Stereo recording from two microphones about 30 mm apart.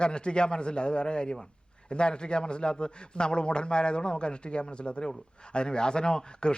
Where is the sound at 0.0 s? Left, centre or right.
Left.